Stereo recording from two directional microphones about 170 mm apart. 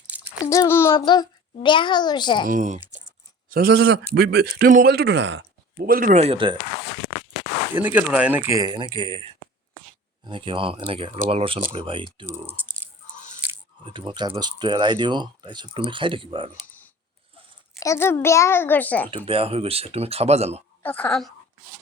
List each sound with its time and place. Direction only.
0.5 s a child's voice: 15° left (ahead or behind)
0.9 s a child's voice: 25° left (ahead or behind)
2.5 s speech: 45° right (ahead or behind)
3.5 s speech: 65° right (ahead or behind); by 6.6 s 30° right (ahead or behind)
7.8 s speech: 10° right (ahead or behind); by 9.2 s 30° right (ahead or behind)
10.2 s speech: 30° right (ahead or behind)
12.2 s speech: 15° right (ahead or behind)
13.8 s speech: 30° right (ahead or behind)
17.7 s a child's voice: 15° left (ahead or behind)
19.1 s speech: 30° right (ahead or behind)
20.8 s a child's voice: 10° left (ahead or behind)